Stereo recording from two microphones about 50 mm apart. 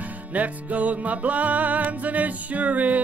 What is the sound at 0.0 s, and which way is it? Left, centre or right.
Music, right.